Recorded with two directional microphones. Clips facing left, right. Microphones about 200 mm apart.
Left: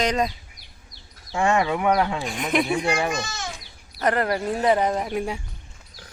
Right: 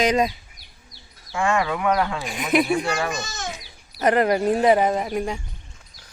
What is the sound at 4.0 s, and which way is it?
Speech, 15° right (ahead or behind).